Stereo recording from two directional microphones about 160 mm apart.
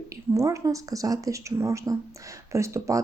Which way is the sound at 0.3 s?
20° right (ahead or behind).